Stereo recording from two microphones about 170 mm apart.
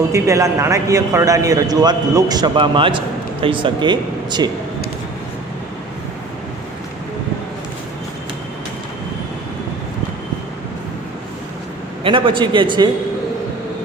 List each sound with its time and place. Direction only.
0.1 s a man's voice: 20° right (ahead or behind)
12.0 s a man's voice: 30° right (ahead or behind)